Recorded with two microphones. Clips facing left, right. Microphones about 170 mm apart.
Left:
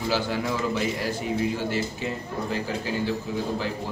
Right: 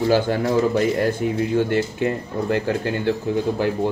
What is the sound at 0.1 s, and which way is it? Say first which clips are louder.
Speech: right 7 dB; 50° right (ahead or behind).